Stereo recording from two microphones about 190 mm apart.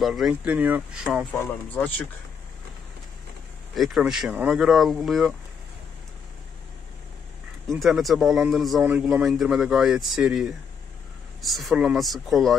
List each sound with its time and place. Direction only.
0.0 s speech: centre (ahead or behind)
1.3 s speech: 10° left (ahead or behind)
3.7 s speech: centre (ahead or behind)
7.6 s speech: centre (ahead or behind)